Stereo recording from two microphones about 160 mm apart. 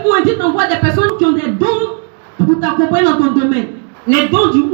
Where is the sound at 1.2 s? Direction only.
25° left (ahead or behind).